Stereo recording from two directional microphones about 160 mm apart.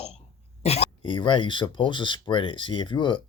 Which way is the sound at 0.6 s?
40° left (ahead or behind).